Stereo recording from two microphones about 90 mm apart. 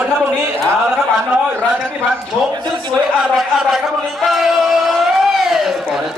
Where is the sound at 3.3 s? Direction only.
5° right (ahead or behind).